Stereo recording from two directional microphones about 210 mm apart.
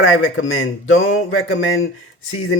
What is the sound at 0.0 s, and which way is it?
Speech, 75° left (ahead or behind).